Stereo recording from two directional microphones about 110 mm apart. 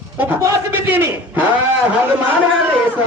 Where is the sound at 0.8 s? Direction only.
15° right (ahead or behind).